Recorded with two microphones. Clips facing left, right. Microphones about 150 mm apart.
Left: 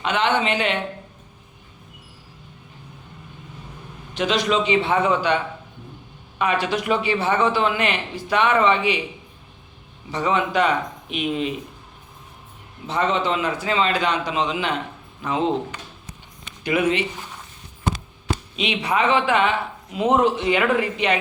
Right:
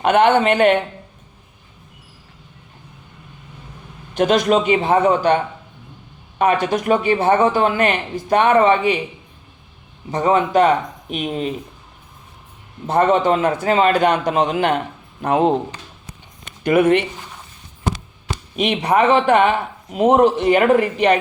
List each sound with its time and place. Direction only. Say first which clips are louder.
0.0 s speech: right 8 dB; 50° right (ahead or behind)
4.1 s speech: right 6 dB; 50° right (ahead or behind)
6.4 s speech: right 5 dB; 50° right (ahead or behind)
10.1 s speech: right 5 dB; 45° right (ahead or behind)
12.9 s speech: right 7 dB; 50° right (ahead or behind)
18.5 s speech: right 7 dB; 50° right (ahead or behind)